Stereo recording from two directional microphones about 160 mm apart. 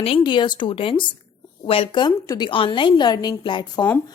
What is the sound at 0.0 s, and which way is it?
A woman's voice, 30° left (ahead or behind).